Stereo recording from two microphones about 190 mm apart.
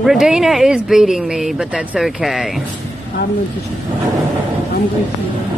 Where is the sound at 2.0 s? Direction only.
Centre (ahead or behind).